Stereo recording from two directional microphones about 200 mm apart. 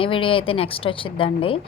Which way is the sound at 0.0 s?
25° left (ahead or behind).